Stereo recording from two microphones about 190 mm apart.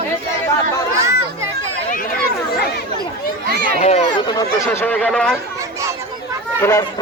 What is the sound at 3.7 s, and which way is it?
Speech, 35° left (ahead or behind).